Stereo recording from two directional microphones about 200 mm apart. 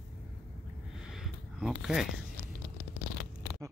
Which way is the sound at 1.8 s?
Centre (ahead or behind).